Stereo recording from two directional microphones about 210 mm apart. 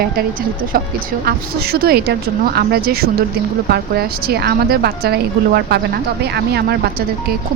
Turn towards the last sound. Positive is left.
turn(degrees=-50)  # may be behind; listen again after turning